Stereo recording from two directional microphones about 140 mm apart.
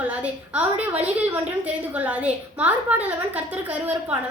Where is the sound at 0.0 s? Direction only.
10° right (ahead or behind).